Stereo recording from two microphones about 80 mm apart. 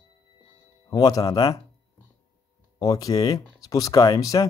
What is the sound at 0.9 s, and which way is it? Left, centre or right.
Speech, left.